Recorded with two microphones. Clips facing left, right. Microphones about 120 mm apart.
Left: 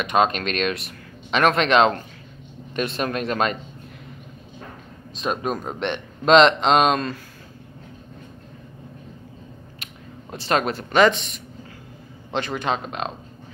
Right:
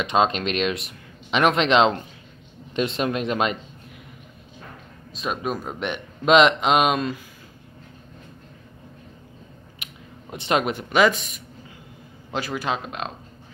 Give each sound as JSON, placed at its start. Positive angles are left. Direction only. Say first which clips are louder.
{"t": 0.0, "sound": "speech", "louder": "left 1 dB", "side_deg": -20}
{"t": 5.1, "sound": "speech", "louder": "left 2 dB", "side_deg": 0}
{"t": 10.3, "sound": "speech", "louder": "even", "side_deg": -15}